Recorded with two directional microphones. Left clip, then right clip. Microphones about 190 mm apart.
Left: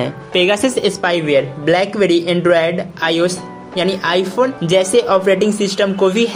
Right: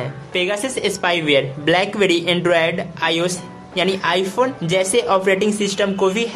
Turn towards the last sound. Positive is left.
turn(degrees=15)  # may be behind; listen again after turning